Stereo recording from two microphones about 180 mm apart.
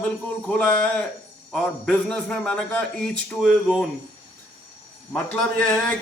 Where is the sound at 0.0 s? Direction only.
5° left (ahead or behind).